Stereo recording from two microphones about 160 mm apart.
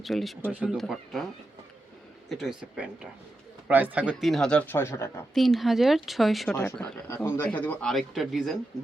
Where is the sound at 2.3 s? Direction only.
Centre (ahead or behind).